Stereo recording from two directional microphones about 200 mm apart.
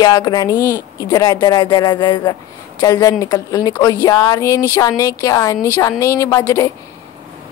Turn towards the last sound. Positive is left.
turn(degrees=15)  # may be behind; listen again after turning